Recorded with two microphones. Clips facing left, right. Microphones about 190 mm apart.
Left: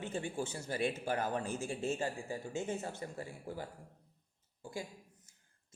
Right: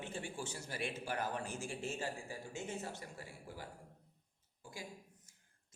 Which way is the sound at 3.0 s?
25° left (ahead or behind).